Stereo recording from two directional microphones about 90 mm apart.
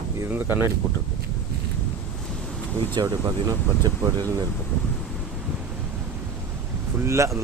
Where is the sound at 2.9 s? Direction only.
50° right (ahead or behind).